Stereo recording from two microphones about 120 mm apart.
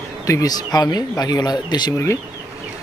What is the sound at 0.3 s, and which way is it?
Speech, 30° left (ahead or behind).